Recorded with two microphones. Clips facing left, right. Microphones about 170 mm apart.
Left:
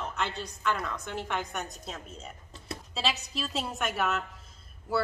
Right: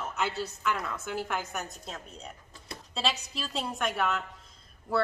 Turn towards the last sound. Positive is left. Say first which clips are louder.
# right 1 dB
turn(degrees=5)  # may be behind; listen again after turning